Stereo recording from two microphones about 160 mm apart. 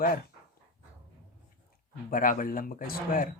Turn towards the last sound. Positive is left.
turn(degrees=60)  # may be behind; listen again after turning